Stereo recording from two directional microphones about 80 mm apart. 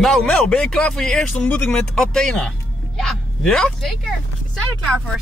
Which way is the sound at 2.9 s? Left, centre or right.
Centre.